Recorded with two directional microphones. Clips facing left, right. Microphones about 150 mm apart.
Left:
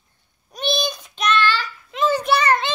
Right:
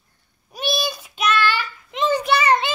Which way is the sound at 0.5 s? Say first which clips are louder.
Left 1 dB; 5° right (ahead or behind).